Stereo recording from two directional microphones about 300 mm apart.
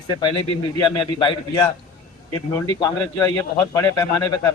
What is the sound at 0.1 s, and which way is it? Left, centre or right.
A man's voice, centre.